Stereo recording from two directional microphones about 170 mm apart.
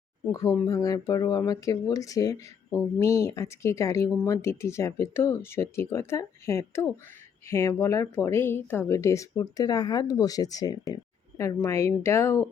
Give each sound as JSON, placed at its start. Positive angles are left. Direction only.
{"t": 0.3, "sound": "speech", "side_deg": 20}